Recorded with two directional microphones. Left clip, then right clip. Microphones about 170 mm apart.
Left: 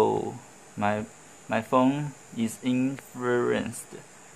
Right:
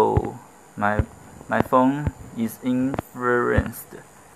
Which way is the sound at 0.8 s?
30° left (ahead or behind).